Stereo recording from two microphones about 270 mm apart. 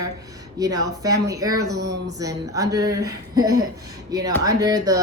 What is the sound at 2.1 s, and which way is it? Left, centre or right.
Speech, centre.